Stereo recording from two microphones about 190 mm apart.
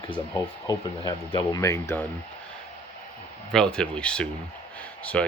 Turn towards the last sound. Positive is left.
turn(degrees=5)  # may be behind; listen again after turning